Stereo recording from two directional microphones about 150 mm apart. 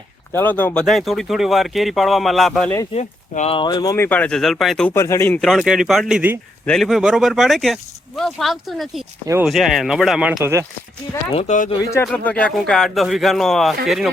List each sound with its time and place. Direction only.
0.3 s speech: 10° left (ahead or behind)
2.9 s speech: 50° left (ahead or behind)
3.5 s speech: 30° left (ahead or behind)
3.9 s speech: 15° left (ahead or behind)
4.9 s speech: 20° left (ahead or behind)
5.4 s speech: centre (ahead or behind)
6.7 s speech: centre (ahead or behind)
10.4 s speech: 20° right (ahead or behind)
11.3 s speech: 55° left (ahead or behind)
11.8 s speech: 20° left (ahead or behind)
12.0 s speech: 10° left (ahead or behind)